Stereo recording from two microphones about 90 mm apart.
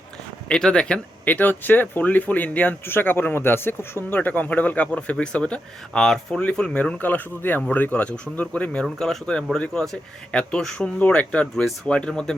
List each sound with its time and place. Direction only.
0.4 s speech: 10° left (ahead or behind)